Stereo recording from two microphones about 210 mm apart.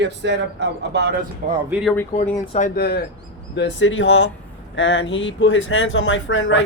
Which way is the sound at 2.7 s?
50° left (ahead or behind).